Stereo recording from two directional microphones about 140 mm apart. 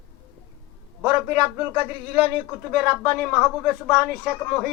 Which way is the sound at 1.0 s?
15° right (ahead or behind).